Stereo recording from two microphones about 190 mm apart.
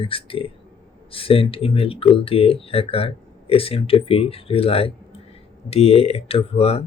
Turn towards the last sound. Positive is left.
turn(degrees=30)  # may be behind; listen again after turning